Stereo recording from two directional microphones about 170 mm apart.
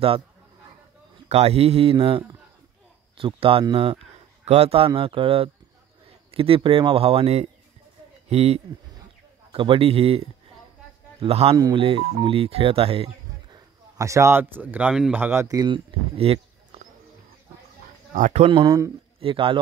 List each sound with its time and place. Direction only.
1.3 s speech: 35° right (ahead or behind)
11.5 s speech: 25° right (ahead or behind)
13.9 s speech: 20° right (ahead or behind); by 16.8 s 35° right (ahead or behind)
18.1 s speech: 45° right (ahead or behind)
18.5 s speech: 25° right (ahead or behind)